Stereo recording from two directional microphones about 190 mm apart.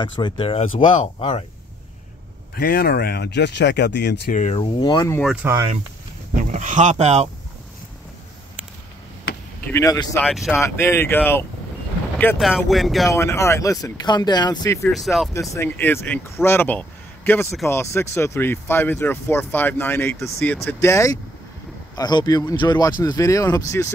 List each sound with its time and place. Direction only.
0.0 s speech: 25° left (ahead or behind)
2.5 s speech: 50° left (ahead or behind)
4.3 s speech: 40° left (ahead or behind)
4.6 s speech: 25° left (ahead or behind)
5.2 s speech: 5° right (ahead or behind)
6.4 s speech: 40° right (ahead or behind)
9.7 s speech: 15° left (ahead or behind)
10.2 s speech: centre (ahead or behind)
10.6 s speech: 15° left (ahead or behind)
12.4 s speech: centre (ahead or behind)
13.1 s speech: 15° left (ahead or behind)
14.8 s speech: centre (ahead or behind)
15.5 s speech: 10° left (ahead or behind)